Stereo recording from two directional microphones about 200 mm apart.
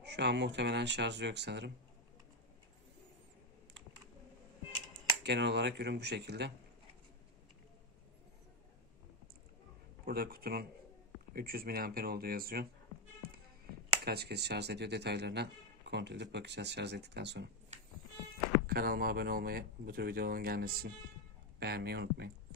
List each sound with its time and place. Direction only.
0.0 s speech: 55° right (ahead or behind)
5.2 s speech: 60° right (ahead or behind)
10.0 s speech: 50° right (ahead or behind)
14.0 s speech: 55° right (ahead or behind)
18.7 s speech: 50° right (ahead or behind)